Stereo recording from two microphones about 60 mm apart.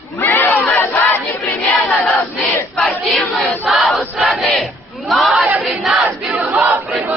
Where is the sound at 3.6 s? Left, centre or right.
Centre.